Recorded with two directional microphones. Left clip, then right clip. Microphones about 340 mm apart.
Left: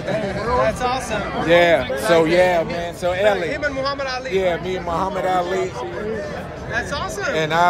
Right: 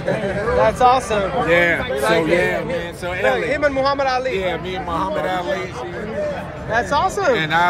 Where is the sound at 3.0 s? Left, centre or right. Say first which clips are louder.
Left 2 dB; left.